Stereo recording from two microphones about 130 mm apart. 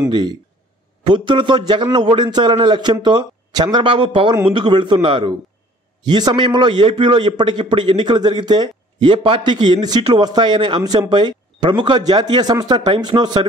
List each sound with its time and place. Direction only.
0.1 s a man's voice: 35° right (ahead or behind)